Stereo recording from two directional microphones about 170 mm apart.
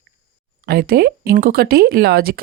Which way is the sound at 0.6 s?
65° right (ahead or behind).